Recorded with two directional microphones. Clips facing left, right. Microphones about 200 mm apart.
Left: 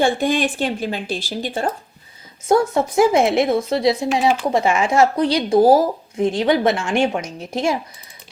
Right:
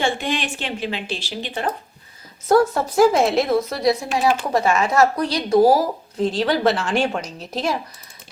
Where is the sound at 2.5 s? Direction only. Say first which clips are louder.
Even; 25° left (ahead or behind).